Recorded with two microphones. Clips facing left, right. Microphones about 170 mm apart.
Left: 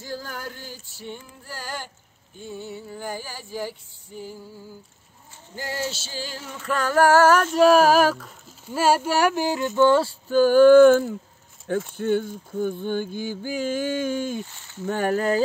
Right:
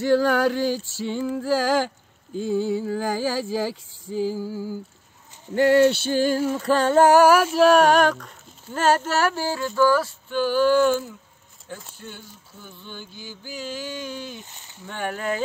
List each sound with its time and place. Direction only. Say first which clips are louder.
0.0 s speech: right 15 dB; 75° right (ahead or behind); by 4.7 s 90° right
5.5 s a sound: right 14 dB; 65° right (ahead or behind); by 11.1 s 50° left (ahead or behind)
11.7 s speech: left 13 dB; 55° left (ahead or behind)
12.0 s a sound: left 18 dB; 55° left (ahead or behind)
14.4 s speech: left 7 dB; 20° right (ahead or behind)
14.9 s speech: left 6 dB; 40° left (ahead or behind)